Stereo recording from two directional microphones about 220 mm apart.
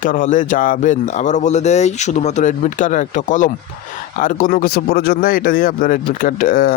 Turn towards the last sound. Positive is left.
turn(degrees=40)  # may be behind; listen again after turning